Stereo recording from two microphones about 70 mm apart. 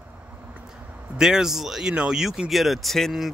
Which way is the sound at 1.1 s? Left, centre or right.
Centre.